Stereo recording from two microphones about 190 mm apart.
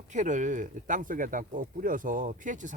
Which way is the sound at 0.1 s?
40° right (ahead or behind).